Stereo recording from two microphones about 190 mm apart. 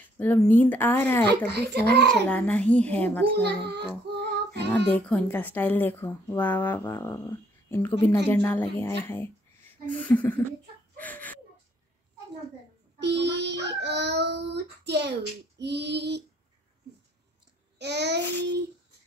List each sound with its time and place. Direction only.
0.2 s speech: 10° left (ahead or behind)
1.5 s speech: 60° right (ahead or behind)
2.0 s speech: 5° left (ahead or behind)
3.3 s child singing: 60° right (ahead or behind)
4.5 s speech: 5° left (ahead or behind)
11.0 s chicken: 10° left (ahead or behind)
13.0 s speech: 60° right (ahead or behind)
17.7 s child singing: 60° right (ahead or behind)